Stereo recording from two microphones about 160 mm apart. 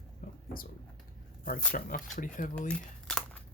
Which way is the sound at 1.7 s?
55° left (ahead or behind).